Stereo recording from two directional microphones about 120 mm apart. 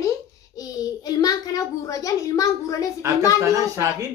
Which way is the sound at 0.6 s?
30° left (ahead or behind).